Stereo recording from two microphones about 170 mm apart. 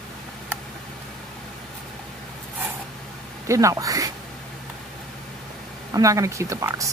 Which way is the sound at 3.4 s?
20° right (ahead or behind).